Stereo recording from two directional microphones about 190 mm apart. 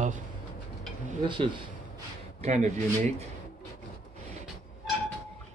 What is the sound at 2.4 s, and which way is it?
Speech, 40° right (ahead or behind).